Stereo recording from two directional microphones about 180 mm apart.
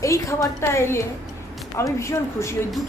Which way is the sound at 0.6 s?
15° left (ahead or behind).